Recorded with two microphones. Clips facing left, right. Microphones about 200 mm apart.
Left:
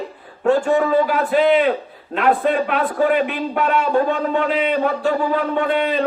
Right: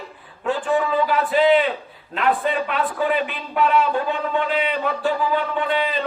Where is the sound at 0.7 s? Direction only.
45° left (ahead or behind).